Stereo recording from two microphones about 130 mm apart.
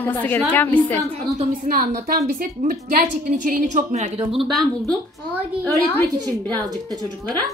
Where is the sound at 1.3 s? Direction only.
90° right; by 4.1 s 65° right (ahead or behind).